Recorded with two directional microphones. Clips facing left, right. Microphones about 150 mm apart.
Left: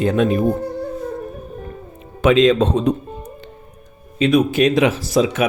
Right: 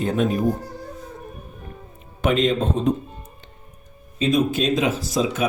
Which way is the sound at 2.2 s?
90° left.